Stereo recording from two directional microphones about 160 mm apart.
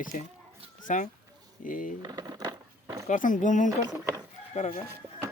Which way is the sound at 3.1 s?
55° left (ahead or behind).